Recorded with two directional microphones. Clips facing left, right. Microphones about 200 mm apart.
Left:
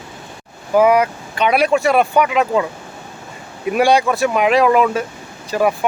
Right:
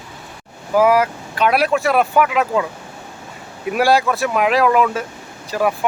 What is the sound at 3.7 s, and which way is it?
Speech, centre (ahead or behind).